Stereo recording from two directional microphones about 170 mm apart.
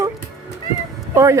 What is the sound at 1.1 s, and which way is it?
Speech, 15° right (ahead or behind).